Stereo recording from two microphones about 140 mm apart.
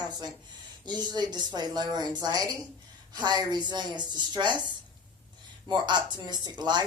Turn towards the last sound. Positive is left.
turn(degrees=-30)  # may be behind; listen again after turning